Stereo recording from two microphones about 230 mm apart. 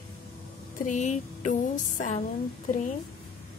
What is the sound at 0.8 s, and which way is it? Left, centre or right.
Speech, left.